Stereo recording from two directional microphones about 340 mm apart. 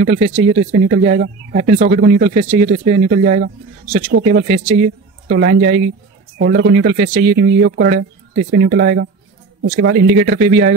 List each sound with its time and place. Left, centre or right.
0.0 s a man's voice: centre